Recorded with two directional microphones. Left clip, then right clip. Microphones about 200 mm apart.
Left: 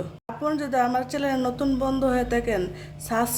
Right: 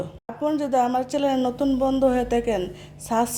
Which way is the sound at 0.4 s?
15° right (ahead or behind).